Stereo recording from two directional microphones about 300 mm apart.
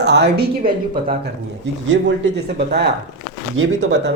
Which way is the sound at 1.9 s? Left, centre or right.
Right.